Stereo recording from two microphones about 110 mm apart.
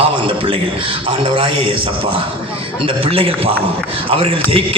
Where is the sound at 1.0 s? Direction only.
50° right (ahead or behind).